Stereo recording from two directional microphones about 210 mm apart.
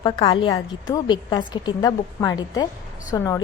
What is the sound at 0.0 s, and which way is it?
A woman's voice, 25° left (ahead or behind).